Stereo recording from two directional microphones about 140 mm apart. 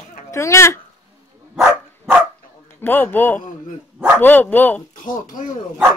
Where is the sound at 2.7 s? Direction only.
15° left (ahead or behind).